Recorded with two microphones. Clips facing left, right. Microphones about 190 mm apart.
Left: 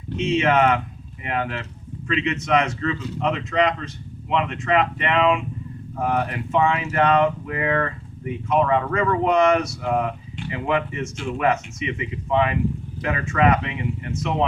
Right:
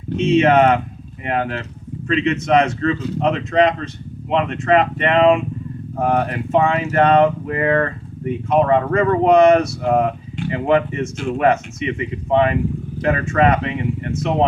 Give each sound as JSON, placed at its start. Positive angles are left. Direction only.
{"t": 0.3, "sound": "speech", "side_deg": -45}
{"t": 9.8, "sound": "speech", "side_deg": -45}
{"t": 10.7, "sound": "speech", "side_deg": -35}